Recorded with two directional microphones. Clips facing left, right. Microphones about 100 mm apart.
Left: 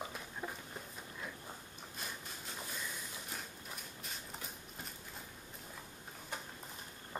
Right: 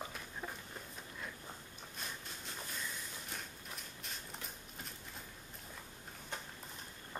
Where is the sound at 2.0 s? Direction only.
Centre (ahead or behind).